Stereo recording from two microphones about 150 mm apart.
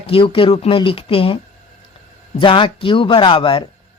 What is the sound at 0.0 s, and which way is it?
Speech, 35° left (ahead or behind).